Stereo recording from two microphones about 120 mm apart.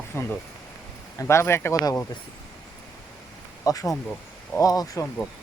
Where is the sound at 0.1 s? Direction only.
20° left (ahead or behind).